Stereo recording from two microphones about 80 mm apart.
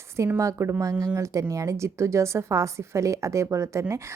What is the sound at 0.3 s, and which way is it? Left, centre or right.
A woman's voice, right.